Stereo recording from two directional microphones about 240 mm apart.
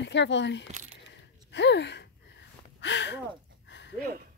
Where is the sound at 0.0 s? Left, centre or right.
Left.